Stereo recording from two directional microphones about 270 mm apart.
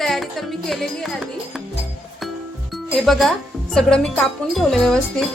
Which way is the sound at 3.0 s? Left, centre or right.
Centre.